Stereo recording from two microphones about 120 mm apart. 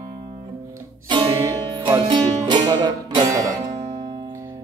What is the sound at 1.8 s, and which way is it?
Music, 35° right (ahead or behind).